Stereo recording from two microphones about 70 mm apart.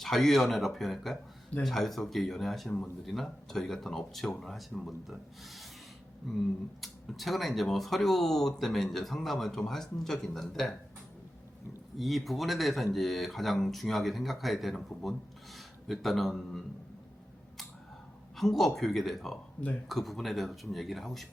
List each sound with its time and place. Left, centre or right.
0.0 s speech: centre
11.9 s a man's voice: centre
18.3 s speech: centre